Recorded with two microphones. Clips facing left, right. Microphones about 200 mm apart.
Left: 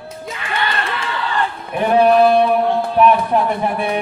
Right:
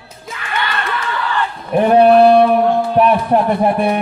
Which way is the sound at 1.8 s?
35° right (ahead or behind).